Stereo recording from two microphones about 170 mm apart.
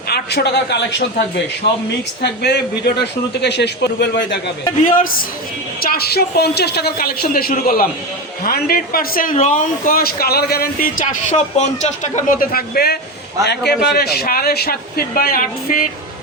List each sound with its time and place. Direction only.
0.1 s a man's voice: 75° left (ahead or behind)
2.2 s a man's voice: 75° left (ahead or behind)
4.8 s a woman's voice: 55° left (ahead or behind)